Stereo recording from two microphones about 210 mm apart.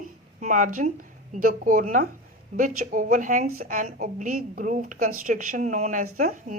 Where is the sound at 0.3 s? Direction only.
40° right (ahead or behind).